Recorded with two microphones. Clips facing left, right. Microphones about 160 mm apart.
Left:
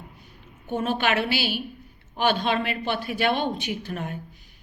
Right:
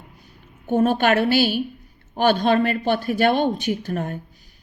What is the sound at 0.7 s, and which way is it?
A woman's voice, 45° right (ahead or behind).